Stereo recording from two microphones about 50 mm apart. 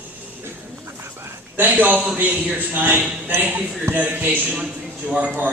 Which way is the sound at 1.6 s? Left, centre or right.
Right.